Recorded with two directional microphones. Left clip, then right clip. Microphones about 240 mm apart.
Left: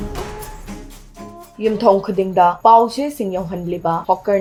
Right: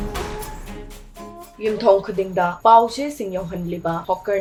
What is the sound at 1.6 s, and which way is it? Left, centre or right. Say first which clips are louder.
Speech: left 2 dB; left.